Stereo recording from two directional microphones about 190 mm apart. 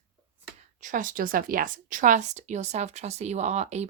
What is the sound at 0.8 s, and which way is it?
A woman's voice, 40° right (ahead or behind).